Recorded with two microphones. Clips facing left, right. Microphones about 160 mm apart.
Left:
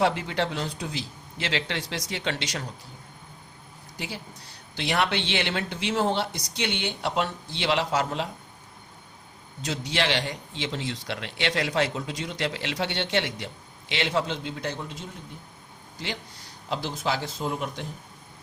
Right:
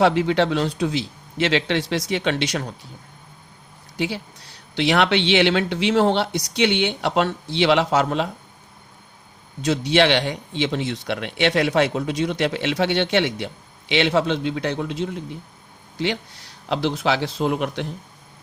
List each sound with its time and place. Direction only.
0.0 s speech: 70° right (ahead or behind)
3.9 s speech: 70° right (ahead or behind)
9.6 s speech: 70° right (ahead or behind)